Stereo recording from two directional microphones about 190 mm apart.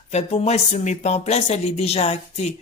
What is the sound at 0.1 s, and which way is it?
Speech, 30° left (ahead or behind).